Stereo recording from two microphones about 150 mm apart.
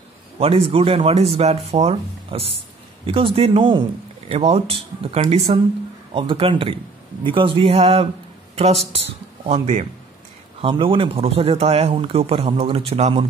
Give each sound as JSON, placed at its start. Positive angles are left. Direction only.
{"t": 0.4, "sound": "speech", "side_deg": -40}
{"t": 9.5, "sound": "speech", "side_deg": -50}
{"t": 10.6, "sound": "speech", "side_deg": -35}